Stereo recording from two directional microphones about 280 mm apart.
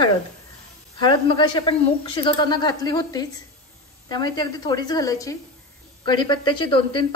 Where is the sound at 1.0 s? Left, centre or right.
Centre.